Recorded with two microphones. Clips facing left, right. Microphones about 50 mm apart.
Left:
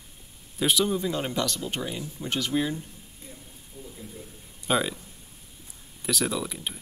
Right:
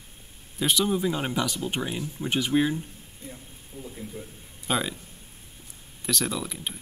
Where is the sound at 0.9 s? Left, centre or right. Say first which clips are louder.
Right 2 dB; centre.